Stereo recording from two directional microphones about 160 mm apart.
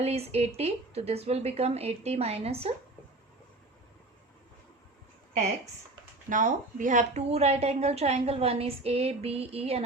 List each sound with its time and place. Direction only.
0.0 s a woman's voice: 40° right (ahead or behind)
6.2 s a woman's voice: 55° right (ahead or behind); by 9.8 s 40° right (ahead or behind)